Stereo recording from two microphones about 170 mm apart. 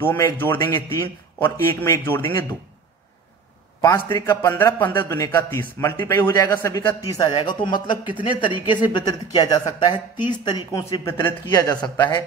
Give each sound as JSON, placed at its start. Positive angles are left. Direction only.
{"t": 0.0, "sound": "a man's voice", "side_deg": 15}
{"t": 3.8, "sound": "a man's voice", "side_deg": 15}